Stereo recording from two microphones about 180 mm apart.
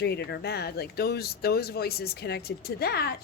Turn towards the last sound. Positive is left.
turn(degrees=60)  # may be behind; listen again after turning